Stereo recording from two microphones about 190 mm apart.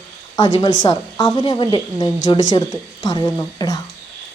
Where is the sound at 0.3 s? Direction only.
20° left (ahead or behind).